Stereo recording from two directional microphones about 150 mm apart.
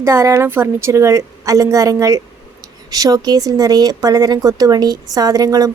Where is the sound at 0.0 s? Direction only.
20° right (ahead or behind).